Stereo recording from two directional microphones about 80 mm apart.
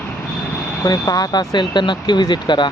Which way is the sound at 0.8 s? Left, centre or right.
Left.